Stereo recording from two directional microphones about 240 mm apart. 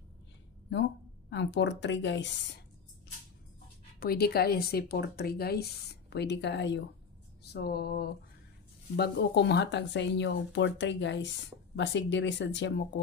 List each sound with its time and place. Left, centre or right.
1.3 s speech: left
4.0 s speech: left